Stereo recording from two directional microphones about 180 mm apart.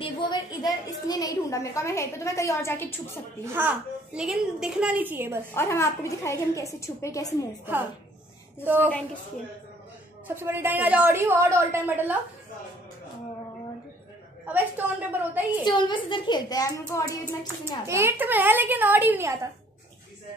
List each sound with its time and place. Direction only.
0.0 s a woman's voice: 25° left (ahead or behind)
3.4 s a woman's voice: 10° right (ahead or behind)
5.5 s a woman's voice: 15° left (ahead or behind)
10.2 s a woman's voice: 15° right (ahead or behind)
14.4 s a woman's voice: 10° right (ahead or behind)
15.6 s a child's voice: 25° left (ahead or behind)
17.8 s a woman's voice: 15° right (ahead or behind)